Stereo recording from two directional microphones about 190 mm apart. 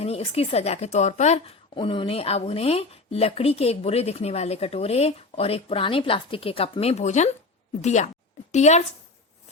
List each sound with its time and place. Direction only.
0.0 s speech: 30° left (ahead or behind)